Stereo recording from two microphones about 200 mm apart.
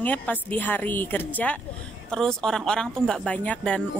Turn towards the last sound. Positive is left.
turn(degrees=5)  # may be behind; listen again after turning